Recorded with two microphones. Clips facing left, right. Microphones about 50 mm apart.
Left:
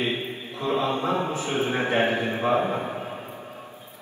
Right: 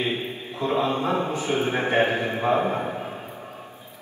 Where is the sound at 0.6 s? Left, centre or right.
Right.